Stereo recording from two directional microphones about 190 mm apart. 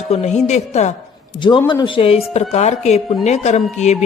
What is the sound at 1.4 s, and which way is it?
A man's voice, 25° left (ahead or behind).